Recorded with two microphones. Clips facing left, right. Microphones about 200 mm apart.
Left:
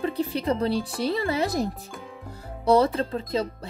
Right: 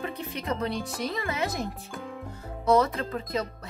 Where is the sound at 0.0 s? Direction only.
30° left (ahead or behind).